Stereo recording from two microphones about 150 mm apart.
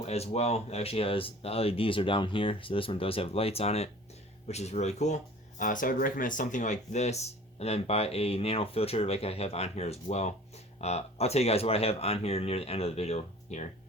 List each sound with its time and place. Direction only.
0.0 s speech: 45° left (ahead or behind)